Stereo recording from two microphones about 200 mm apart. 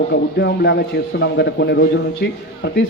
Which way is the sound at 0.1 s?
60° left (ahead or behind).